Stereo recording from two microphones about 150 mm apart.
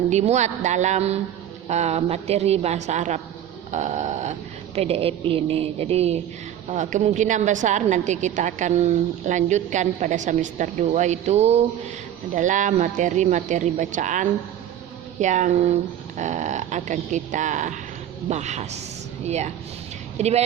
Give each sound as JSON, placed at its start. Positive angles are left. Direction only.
{"t": 0.1, "sound": "a woman's voice", "side_deg": -50}
{"t": 12.3, "sound": "a woman's voice", "side_deg": -55}